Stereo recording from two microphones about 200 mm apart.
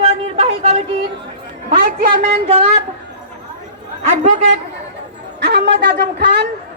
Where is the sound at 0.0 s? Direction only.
30° right (ahead or behind).